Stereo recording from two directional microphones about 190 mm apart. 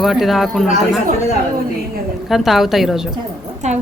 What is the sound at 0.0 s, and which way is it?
Speech, centre (ahead or behind).